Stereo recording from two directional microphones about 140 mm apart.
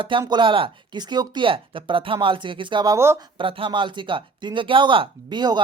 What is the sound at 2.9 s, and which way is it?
Speech, 20° right (ahead or behind).